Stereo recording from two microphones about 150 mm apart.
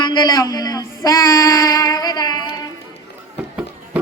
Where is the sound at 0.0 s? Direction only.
30° left (ahead or behind).